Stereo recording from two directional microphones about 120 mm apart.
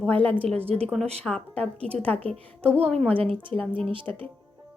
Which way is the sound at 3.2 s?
50° right (ahead or behind).